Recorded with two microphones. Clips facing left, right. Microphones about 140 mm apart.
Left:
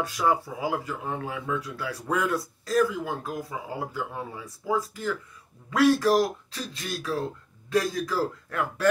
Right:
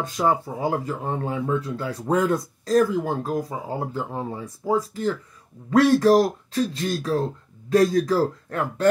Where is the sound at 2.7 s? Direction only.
35° right (ahead or behind).